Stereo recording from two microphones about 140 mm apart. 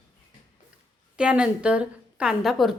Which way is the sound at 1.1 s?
5° right (ahead or behind).